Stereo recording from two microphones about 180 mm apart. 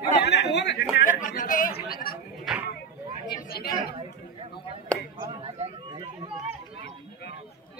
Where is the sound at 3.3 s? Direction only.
60° left (ahead or behind).